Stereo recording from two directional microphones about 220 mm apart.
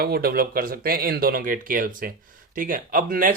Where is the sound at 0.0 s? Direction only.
45° right (ahead or behind).